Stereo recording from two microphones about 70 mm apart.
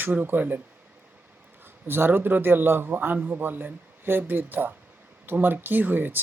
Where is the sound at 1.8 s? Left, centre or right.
Right.